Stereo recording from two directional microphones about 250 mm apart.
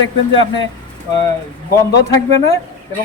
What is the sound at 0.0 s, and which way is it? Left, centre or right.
Speech, left.